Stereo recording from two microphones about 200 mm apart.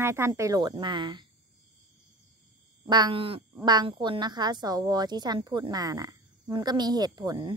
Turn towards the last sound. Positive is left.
turn(degrees=-20)  # may be behind; listen again after turning